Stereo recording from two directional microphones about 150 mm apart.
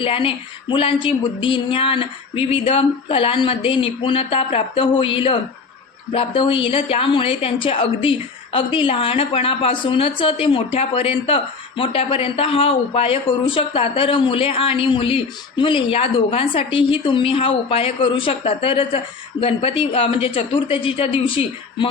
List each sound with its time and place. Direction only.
0.0 s speech: 35° left (ahead or behind)